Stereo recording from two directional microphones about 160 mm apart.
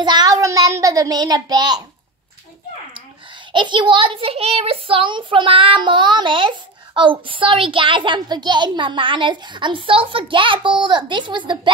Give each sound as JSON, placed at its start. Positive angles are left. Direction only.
{"t": 0.0, "sound": "a child's voice", "side_deg": -25}
{"t": 3.5, "sound": "a child's voice", "side_deg": -30}